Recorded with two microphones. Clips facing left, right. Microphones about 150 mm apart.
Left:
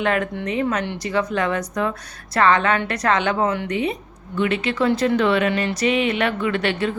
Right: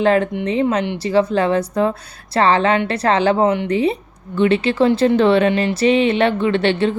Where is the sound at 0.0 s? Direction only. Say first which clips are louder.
Right 6 dB; 30° right (ahead or behind).